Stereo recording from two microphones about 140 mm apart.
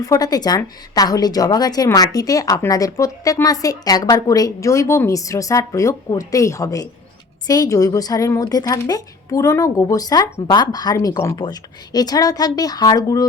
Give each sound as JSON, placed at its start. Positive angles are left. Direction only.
{"t": 0.0, "sound": "a woman's voice", "side_deg": 25}
{"t": 11.3, "sound": "a woman's voice", "side_deg": 30}